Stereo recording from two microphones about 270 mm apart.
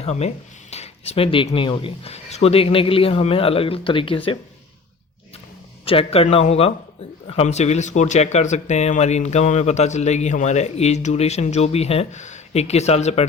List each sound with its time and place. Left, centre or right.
0.0 s speech: left
5.8 s speech: left